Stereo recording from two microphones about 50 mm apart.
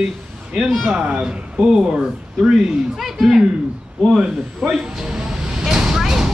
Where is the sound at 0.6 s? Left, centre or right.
Centre.